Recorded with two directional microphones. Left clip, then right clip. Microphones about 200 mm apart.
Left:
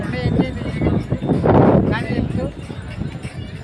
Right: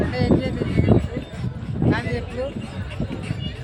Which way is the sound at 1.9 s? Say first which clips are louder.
Left 2 dB; 20° right (ahead or behind).